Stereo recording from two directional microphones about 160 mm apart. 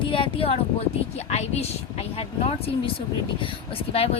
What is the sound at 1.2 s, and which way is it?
Speech, 40° left (ahead or behind).